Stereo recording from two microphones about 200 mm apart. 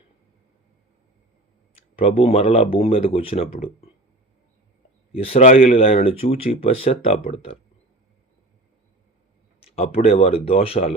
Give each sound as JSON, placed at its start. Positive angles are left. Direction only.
{"t": 2.0, "sound": "speech", "side_deg": 30}
{"t": 5.1, "sound": "speech", "side_deg": 30}
{"t": 9.6, "sound": "speech", "side_deg": 30}